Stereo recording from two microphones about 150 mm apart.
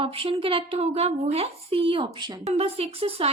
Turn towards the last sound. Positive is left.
turn(degrees=-40)  # may be behind; listen again after turning